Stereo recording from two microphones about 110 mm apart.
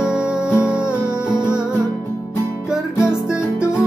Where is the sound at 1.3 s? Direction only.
25° left (ahead or behind).